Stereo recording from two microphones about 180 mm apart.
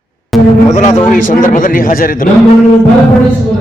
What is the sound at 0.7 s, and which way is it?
Speech, 40° left (ahead or behind).